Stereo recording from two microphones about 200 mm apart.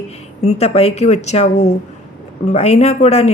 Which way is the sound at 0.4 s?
30° left (ahead or behind).